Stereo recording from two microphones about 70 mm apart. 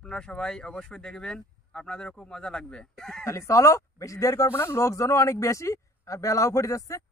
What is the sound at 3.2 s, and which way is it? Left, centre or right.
Speech, left.